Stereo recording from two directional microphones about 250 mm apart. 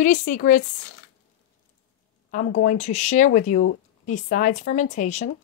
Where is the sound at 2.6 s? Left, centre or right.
Left.